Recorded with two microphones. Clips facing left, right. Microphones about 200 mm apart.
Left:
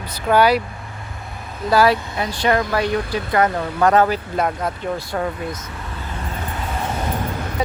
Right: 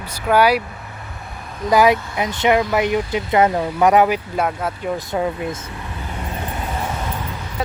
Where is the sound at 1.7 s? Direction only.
20° right (ahead or behind).